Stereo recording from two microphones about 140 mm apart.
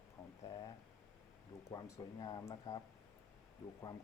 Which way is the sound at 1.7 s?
20° left (ahead or behind).